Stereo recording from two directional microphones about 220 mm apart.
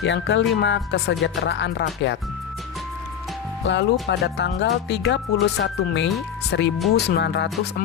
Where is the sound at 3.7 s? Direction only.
55° left (ahead or behind).